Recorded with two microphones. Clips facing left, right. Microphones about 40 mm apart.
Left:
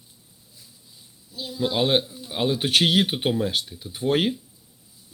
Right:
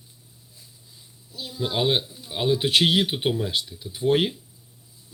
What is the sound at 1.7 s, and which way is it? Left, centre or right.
Speech, left.